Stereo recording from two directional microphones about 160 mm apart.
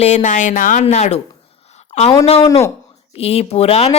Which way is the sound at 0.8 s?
45° left (ahead or behind).